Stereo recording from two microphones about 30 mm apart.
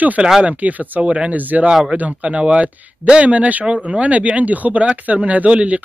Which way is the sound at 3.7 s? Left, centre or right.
Right.